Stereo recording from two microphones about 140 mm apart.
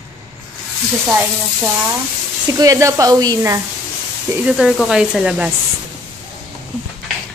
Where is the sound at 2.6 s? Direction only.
25° right (ahead or behind).